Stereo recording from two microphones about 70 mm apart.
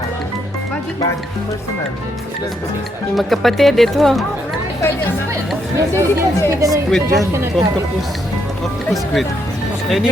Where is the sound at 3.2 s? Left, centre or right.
Centre.